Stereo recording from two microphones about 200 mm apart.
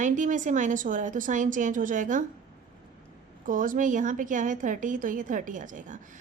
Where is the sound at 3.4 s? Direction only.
40° right (ahead or behind).